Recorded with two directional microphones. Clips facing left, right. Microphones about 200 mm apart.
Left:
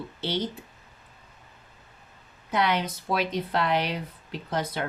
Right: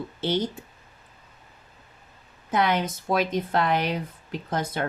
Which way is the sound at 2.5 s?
50° right (ahead or behind).